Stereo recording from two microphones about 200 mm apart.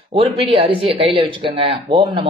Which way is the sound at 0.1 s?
30° right (ahead or behind).